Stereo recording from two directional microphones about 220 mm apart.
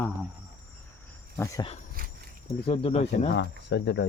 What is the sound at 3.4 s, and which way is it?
Speech, 55° left (ahead or behind).